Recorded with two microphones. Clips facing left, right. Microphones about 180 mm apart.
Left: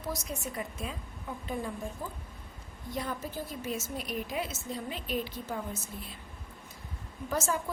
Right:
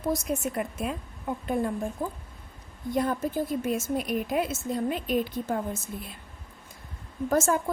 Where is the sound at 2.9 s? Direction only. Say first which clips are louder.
Right 9 dB; 50° right (ahead or behind).